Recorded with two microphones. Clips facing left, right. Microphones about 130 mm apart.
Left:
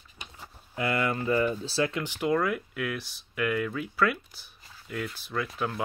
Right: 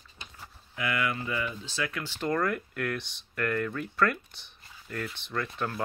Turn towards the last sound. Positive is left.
turn(degrees=5)  # may be behind; listen again after turning